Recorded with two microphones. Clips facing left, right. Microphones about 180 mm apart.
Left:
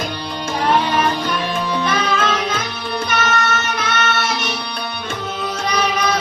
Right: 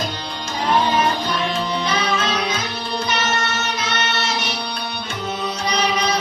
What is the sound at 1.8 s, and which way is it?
Music, 55° left (ahead or behind).